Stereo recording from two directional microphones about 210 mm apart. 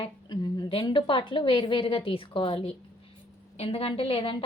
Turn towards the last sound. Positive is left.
turn(degrees=25)  # may be behind; listen again after turning